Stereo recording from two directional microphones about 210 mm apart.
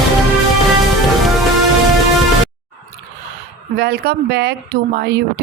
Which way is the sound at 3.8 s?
50° right (ahead or behind).